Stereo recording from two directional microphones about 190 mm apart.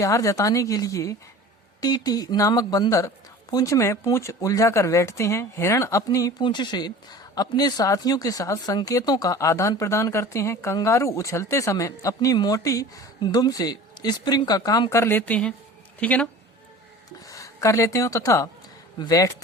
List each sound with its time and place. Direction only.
0.0 s speech: 15° left (ahead or behind)
17.2 s speech: 15° left (ahead or behind)